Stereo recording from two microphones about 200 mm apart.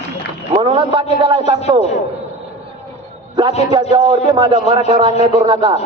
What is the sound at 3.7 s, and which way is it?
Speech, 20° right (ahead or behind).